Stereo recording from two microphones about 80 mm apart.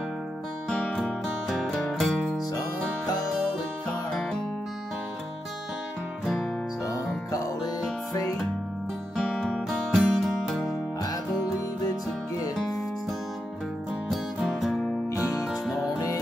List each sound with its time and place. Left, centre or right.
0.7 s music: centre
4.1 s music: centre
9.1 s music: centre
11.8 s music: left
14.4 s music: centre